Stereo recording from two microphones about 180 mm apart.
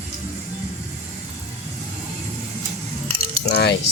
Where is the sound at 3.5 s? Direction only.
65° left (ahead or behind).